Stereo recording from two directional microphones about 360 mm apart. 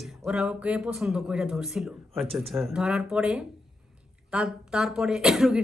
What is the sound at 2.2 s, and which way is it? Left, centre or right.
Speech, centre.